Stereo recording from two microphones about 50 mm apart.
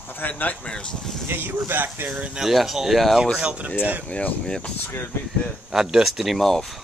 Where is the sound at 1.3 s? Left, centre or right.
Right.